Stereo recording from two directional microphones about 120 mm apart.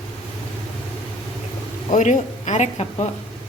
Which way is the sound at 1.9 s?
85° left.